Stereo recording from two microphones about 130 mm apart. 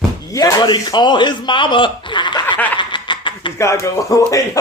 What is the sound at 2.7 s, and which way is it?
Chuckle, 35° left (ahead or behind).